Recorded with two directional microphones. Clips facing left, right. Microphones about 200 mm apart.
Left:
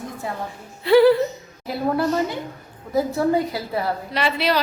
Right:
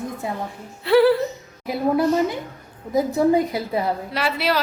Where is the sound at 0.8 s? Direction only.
Centre (ahead or behind).